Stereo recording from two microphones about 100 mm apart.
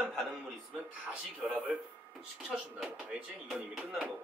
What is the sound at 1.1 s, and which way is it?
Speech, 15° right (ahead or behind).